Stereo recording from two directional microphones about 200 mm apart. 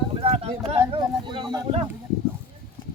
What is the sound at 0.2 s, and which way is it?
Speech, 30° right (ahead or behind).